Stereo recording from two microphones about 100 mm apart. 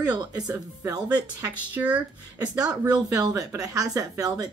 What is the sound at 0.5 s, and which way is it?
Speech, 40° right (ahead or behind).